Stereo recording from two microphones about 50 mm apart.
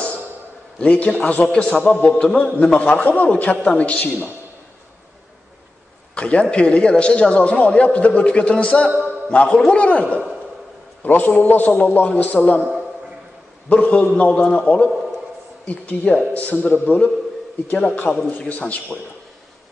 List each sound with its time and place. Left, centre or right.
0.7 s a man's voice: left
6.1 s a man's voice: left
11.0 s a man's voice: left
13.7 s a man's voice: left
15.6 s a man's voice: left